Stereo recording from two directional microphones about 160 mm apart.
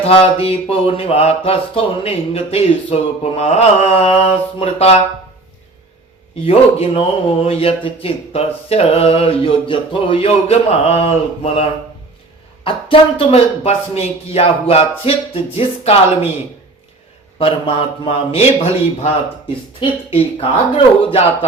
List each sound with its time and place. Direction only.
0.0 s speech: 35° left (ahead or behind)
6.4 s speech: 35° left (ahead or behind)
12.6 s speech: 35° left (ahead or behind)
17.3 s speech: 35° left (ahead or behind)
19.8 s speech: 35° left (ahead or behind)